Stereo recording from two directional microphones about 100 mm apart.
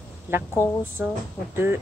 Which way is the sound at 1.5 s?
20° right (ahead or behind).